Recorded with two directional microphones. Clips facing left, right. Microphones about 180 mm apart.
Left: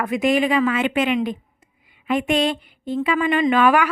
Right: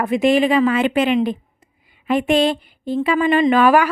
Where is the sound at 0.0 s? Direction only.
30° right (ahead or behind).